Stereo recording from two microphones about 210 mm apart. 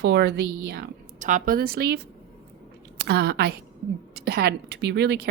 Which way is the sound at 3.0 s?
50° right (ahead or behind).